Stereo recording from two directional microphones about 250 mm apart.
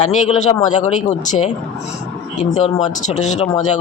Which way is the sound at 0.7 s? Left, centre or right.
Left.